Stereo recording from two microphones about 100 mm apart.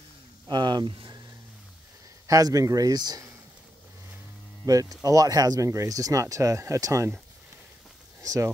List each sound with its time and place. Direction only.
0.5 s speech: 45° right (ahead or behind)
2.2 s speech: 35° right (ahead or behind)
4.6 s speech: 35° right (ahead or behind)
8.2 s speech: 35° right (ahead or behind)